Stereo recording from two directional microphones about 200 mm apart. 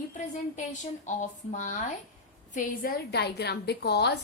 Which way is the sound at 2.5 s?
50° left (ahead or behind).